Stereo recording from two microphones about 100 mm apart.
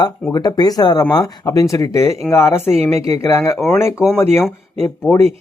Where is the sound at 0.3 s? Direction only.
40° left (ahead or behind).